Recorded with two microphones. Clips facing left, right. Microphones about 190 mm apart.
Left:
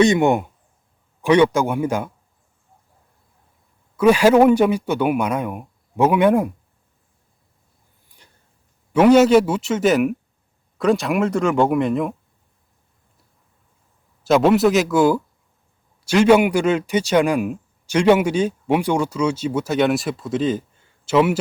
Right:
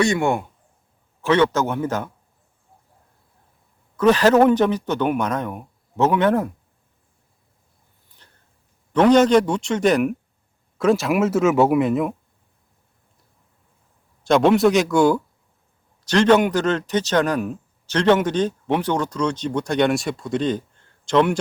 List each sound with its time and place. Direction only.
0.0 s speech: 20° left (ahead or behind)
3.9 s speech: 10° left (ahead or behind)
8.2 s a sound: 10° left (ahead or behind)
8.9 s speech: 10° left (ahead or behind)
14.3 s speech: 5° left (ahead or behind)